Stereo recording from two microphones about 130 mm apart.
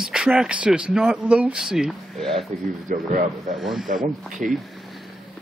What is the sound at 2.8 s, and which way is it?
Speech, 90° right.